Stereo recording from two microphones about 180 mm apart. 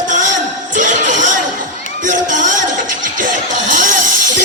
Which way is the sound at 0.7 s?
45° right (ahead or behind).